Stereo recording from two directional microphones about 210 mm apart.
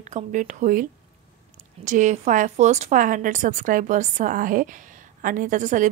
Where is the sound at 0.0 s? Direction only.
35° right (ahead or behind).